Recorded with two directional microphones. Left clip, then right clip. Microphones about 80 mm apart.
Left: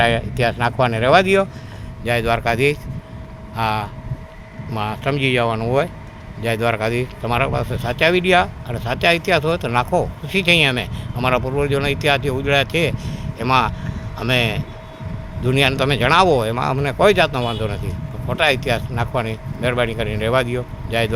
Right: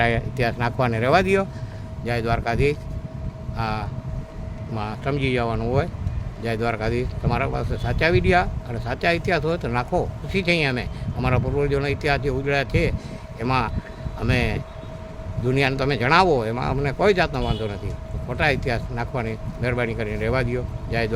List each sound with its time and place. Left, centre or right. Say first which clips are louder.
0.0 s speech: left 5 dB; centre
2.0 s speech: left 6 dB; centre
3.5 s speech: left 7 dB; left